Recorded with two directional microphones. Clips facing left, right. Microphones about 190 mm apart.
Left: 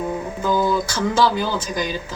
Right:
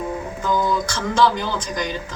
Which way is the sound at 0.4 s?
10° left (ahead or behind).